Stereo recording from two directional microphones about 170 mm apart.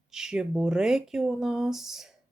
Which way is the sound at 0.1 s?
5° right (ahead or behind).